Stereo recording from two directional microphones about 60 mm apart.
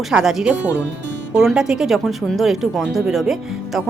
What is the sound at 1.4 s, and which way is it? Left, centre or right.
Speech, centre.